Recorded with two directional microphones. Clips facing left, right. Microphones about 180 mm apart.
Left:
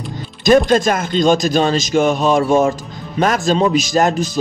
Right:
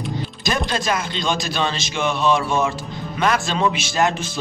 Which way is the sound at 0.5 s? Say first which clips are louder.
Left 11 dB; 45° left (ahead or behind).